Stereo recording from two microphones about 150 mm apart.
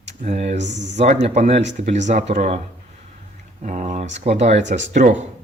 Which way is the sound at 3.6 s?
55° right (ahead or behind).